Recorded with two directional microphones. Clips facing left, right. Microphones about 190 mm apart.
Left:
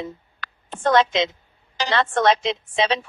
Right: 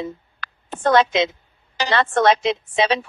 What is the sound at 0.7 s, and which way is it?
A woman's voice, 5° right (ahead or behind).